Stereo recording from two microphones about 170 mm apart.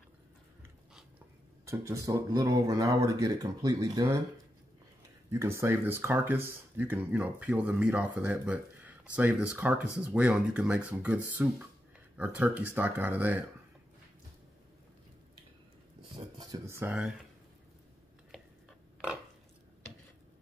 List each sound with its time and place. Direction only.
1.7 s speech: 20° right (ahead or behind)
5.3 s speech: 15° right (ahead or behind)
16.3 s speech: 20° right (ahead or behind)